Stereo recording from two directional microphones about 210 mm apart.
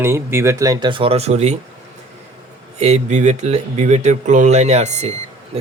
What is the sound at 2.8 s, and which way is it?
Speech, 30° right (ahead or behind).